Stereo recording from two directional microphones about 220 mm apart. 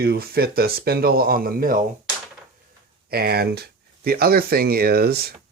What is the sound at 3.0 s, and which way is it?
Speech, 45° right (ahead or behind).